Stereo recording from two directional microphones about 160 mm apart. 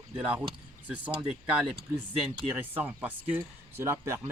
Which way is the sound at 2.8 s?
10° right (ahead or behind).